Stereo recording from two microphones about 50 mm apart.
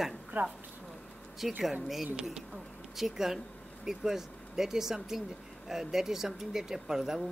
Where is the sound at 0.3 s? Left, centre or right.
Right.